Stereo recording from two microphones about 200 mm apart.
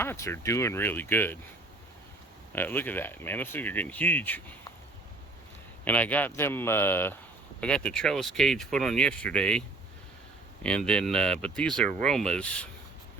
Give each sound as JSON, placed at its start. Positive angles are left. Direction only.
{"t": 0.0, "sound": "speech", "side_deg": 10}
{"t": 2.5, "sound": "speech", "side_deg": 10}
{"t": 5.8, "sound": "speech", "side_deg": 10}